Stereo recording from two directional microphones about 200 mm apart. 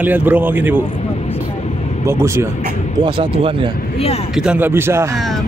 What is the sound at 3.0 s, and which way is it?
Speech, 25° right (ahead or behind).